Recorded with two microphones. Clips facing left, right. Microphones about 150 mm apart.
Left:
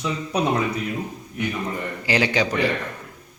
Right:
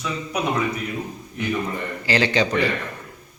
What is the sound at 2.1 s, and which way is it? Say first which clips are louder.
Speech: right 1 dB; 10° left (ahead or behind).